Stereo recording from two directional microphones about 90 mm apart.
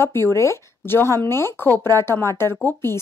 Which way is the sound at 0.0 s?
30° left (ahead or behind).